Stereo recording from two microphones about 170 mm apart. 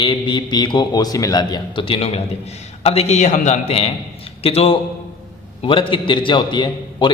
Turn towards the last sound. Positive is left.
turn(degrees=25)  # may be behind; listen again after turning